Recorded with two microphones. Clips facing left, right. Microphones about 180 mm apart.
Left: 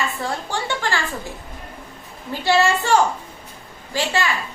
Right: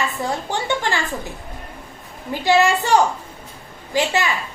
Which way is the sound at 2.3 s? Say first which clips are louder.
Right 2 dB; 15° right (ahead or behind).